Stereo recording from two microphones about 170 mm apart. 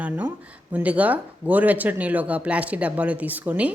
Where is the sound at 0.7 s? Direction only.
10° right (ahead or behind).